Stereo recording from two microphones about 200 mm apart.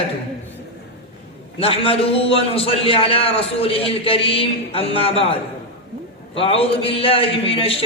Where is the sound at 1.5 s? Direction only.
30° left (ahead or behind).